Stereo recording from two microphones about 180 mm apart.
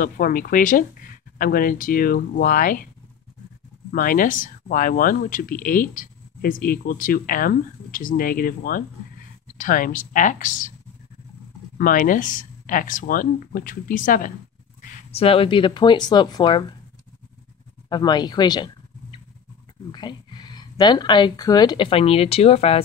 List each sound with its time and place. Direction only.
0.0 s speech: 50° left (ahead or behind)
3.9 s speech: 50° left (ahead or behind)
11.8 s speech: 50° left (ahead or behind); by 16.7 s 25° left (ahead or behind)
17.8 s a sound: 25° left (ahead or behind)
19.9 s speech: 25° left (ahead or behind)